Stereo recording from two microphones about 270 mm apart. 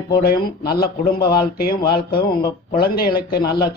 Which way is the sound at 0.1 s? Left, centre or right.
Left.